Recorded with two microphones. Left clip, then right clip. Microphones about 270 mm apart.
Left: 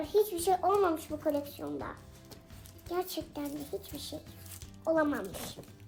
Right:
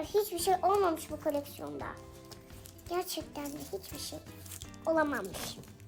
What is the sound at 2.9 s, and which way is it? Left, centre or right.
Speech, centre.